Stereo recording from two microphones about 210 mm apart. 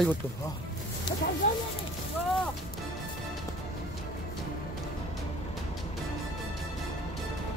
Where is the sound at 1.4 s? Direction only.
35° left (ahead or behind).